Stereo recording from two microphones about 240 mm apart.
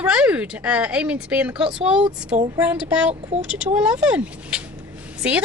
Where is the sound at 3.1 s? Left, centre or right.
Right.